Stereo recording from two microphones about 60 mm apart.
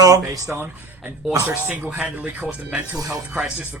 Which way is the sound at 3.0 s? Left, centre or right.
Centre.